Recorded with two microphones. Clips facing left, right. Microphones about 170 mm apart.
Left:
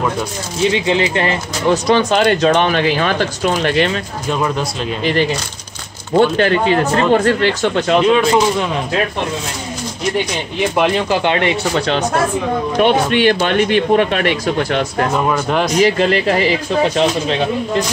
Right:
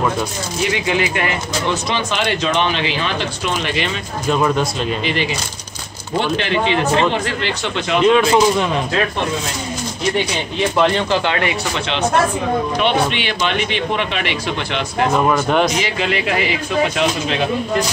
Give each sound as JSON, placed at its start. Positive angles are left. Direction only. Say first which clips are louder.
{"t": 0.7, "sound": "speech", "louder": "left 3 dB", "side_deg": 25}
{"t": 1.9, "sound": "speech", "louder": "left 7 dB", "side_deg": 45}
{"t": 4.3, "sound": "speech", "louder": "right 2 dB", "side_deg": 0}
{"t": 5.0, "sound": "speech", "louder": "left 5 dB", "side_deg": 45}
{"t": 8.1, "sound": "speech", "louder": "even", "side_deg": 0}
{"t": 10.8, "sound": "speech", "louder": "left 1 dB", "side_deg": 15}
{"t": 11.7, "sound": "speech", "louder": "left 2 dB", "side_deg": 40}
{"t": 15.2, "sound": "speech", "louder": "right 1 dB", "side_deg": 0}
{"t": 15.7, "sound": "speech", "louder": "left 7 dB", "side_deg": 40}